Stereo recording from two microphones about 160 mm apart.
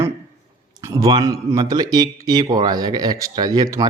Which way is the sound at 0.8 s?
25° right (ahead or behind).